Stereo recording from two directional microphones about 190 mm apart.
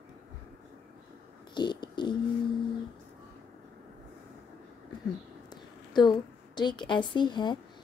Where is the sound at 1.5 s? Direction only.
25° left (ahead or behind).